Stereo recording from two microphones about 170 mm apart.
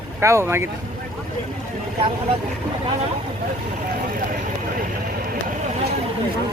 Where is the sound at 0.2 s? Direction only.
15° right (ahead or behind).